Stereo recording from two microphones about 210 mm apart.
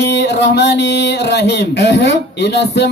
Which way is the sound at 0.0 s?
55° left (ahead or behind).